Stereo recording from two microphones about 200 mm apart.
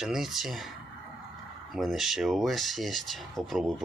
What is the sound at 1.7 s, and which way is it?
Speech, centre (ahead or behind).